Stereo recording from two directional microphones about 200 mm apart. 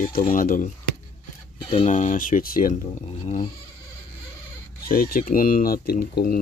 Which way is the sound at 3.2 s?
30° left (ahead or behind).